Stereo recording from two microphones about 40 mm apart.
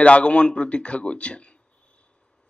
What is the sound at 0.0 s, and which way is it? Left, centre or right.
A man's voice, left.